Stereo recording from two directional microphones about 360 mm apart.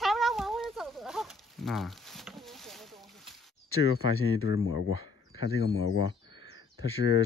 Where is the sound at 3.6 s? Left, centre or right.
Left.